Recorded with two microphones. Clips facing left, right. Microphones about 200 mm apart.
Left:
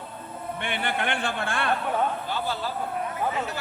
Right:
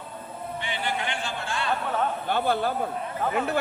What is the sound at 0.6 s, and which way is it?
A man's voice, 60° left (ahead or behind).